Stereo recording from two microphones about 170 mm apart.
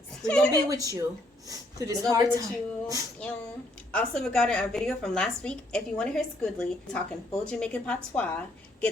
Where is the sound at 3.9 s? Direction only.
5° left (ahead or behind).